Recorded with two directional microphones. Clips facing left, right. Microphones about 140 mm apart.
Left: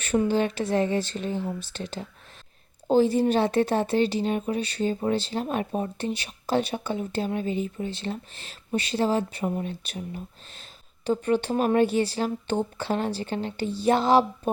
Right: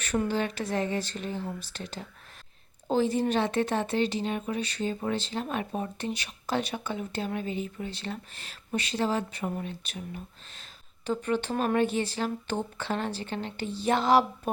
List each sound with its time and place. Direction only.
0.3 s speech: 30° left (ahead or behind)